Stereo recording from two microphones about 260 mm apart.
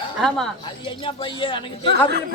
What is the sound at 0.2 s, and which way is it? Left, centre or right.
Speech, centre.